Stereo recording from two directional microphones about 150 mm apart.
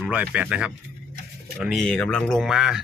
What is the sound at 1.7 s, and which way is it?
Speech, 5° left (ahead or behind).